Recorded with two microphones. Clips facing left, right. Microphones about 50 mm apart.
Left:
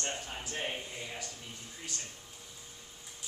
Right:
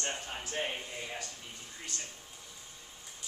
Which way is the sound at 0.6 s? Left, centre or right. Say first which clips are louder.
Right 2 dB; centre.